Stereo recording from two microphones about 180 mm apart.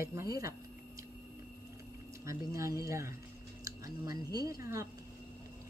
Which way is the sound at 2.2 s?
15° right (ahead or behind).